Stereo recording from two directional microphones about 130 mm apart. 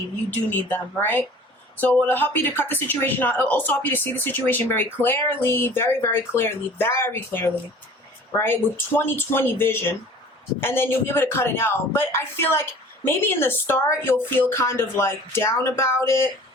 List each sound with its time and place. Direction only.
0.7 s speech: 15° left (ahead or behind)